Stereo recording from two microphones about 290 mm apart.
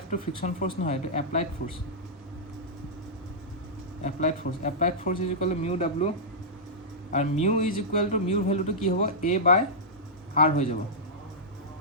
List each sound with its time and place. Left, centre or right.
0.1 s a man's voice: left
4.0 s a man's voice: left
7.1 s a man's voice: left